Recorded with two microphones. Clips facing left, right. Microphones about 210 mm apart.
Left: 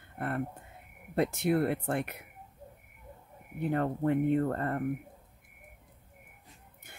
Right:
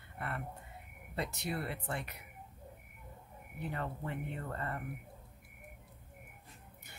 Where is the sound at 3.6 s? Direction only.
55° left (ahead or behind).